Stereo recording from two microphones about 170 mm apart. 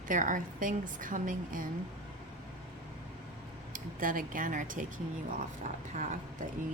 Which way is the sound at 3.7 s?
55° right (ahead or behind).